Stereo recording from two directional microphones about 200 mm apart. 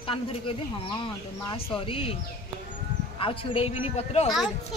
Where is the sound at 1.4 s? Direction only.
25° left (ahead or behind).